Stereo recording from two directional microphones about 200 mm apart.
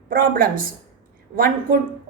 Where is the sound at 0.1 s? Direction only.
45° right (ahead or behind).